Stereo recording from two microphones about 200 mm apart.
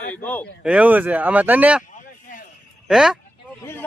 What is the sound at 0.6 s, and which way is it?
Speech, 5° right (ahead or behind).